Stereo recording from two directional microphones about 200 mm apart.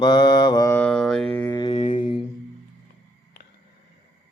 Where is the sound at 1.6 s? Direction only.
30° left (ahead or behind).